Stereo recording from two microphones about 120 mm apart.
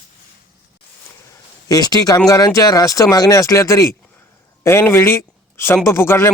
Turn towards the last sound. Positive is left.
turn(degrees=20)  # may be behind; listen again after turning